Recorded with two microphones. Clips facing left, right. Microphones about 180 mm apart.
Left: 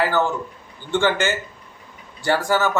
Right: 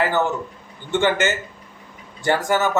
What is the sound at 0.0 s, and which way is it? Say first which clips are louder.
A man's voice: even; 20° right (ahead or behind).